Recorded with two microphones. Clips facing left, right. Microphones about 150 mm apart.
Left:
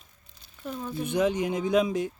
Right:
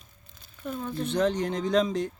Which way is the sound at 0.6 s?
Centre (ahead or behind).